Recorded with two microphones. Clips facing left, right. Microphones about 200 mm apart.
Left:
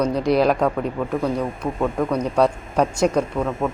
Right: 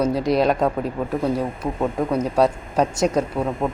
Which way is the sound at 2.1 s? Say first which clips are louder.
Right 1 dB; 5° right (ahead or behind).